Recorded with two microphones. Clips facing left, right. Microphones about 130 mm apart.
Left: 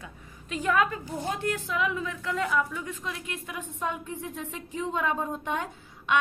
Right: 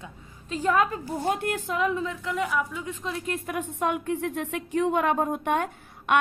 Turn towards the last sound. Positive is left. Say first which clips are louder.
# right 4 dB
turn(degrees=-60)  # may be behind; listen again after turning